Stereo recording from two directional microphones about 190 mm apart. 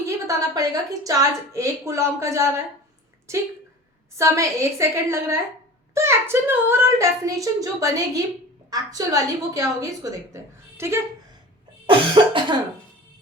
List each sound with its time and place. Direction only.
0.0 s a woman's voice: 20° right (ahead or behind)
11.9 s cough: 25° right (ahead or behind)